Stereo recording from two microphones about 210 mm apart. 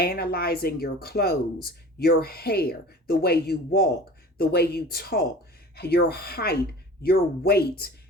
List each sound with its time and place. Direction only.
0.0 s speech: 45° left (ahead or behind)